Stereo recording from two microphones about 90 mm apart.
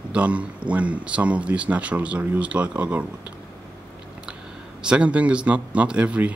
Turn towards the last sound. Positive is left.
turn(degrees=-15)  # may be behind; listen again after turning